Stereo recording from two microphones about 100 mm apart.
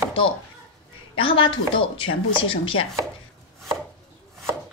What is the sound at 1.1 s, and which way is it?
Speech, 60° left (ahead or behind).